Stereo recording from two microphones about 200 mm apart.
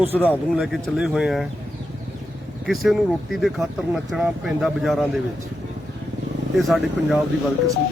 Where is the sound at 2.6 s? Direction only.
Centre (ahead or behind).